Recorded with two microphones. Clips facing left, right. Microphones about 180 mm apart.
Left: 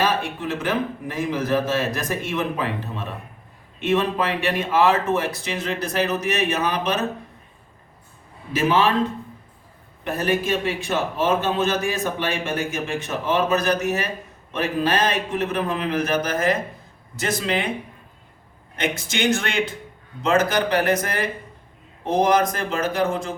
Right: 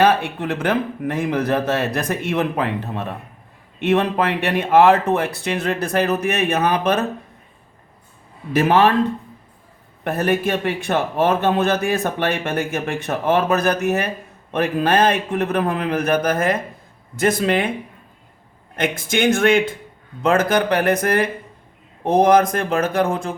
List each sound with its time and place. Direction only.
0.0 s a man's voice: 60° right (ahead or behind)
8.5 s a man's voice: 55° right (ahead or behind)
10.0 s a man's voice: 55° right (ahead or behind)
18.8 s a man's voice: 50° right (ahead or behind)